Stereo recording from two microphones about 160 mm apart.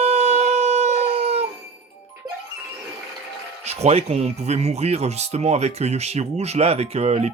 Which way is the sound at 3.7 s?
40° right (ahead or behind).